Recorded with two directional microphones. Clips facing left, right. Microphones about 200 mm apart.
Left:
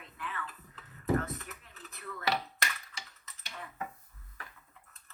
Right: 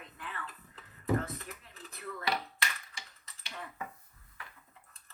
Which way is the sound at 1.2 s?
35° right (ahead or behind).